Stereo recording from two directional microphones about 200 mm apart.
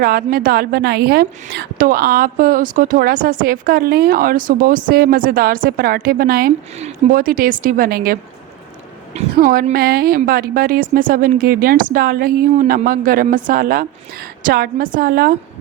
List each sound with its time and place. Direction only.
0.0 s a woman's voice: 45° right (ahead or behind)